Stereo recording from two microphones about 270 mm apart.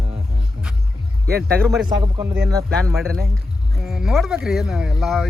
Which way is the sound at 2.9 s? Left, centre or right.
Centre.